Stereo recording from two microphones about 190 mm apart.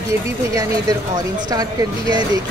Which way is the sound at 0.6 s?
20° right (ahead or behind).